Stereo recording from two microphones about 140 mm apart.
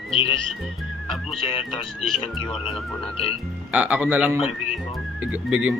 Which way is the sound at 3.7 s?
10° right (ahead or behind).